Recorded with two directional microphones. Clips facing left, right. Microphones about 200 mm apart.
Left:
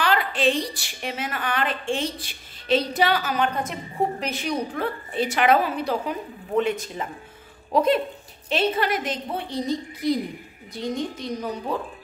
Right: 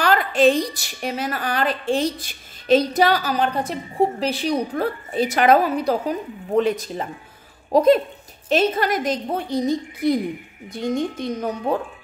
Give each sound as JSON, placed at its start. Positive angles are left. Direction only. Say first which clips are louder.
{"t": 0.0, "sound": "a woman's voice", "louder": "right 5 dB", "side_deg": -45}